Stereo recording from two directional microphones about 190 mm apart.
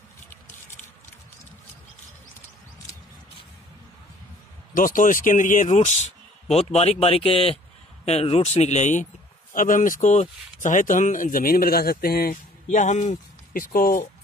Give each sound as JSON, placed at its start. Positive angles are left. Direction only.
{"t": 4.7, "sound": "speech", "side_deg": 45}